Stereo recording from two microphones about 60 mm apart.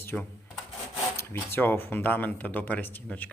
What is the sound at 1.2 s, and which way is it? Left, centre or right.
Speech, left.